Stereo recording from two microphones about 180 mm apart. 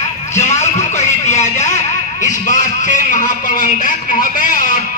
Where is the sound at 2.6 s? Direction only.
45° left (ahead or behind).